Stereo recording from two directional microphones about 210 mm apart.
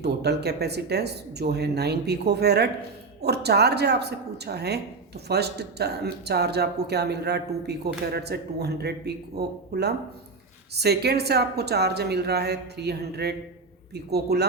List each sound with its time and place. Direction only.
0.0 s speech: 50° right (ahead or behind)